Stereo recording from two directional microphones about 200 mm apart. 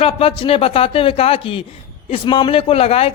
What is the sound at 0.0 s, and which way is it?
A man's voice, 25° left (ahead or behind).